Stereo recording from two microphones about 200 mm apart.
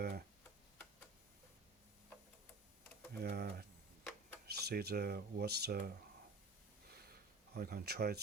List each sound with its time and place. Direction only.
0.0 s tick-tock: 50° right (ahead or behind)
3.1 s typing: 55° right (ahead or behind)
4.4 s speech: 50° right (ahead or behind)
6.9 s a sound: 50° right (ahead or behind)